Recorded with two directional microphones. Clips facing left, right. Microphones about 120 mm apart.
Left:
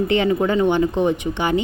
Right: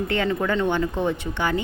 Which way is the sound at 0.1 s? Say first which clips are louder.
Left 4 dB; 15° left (ahead or behind).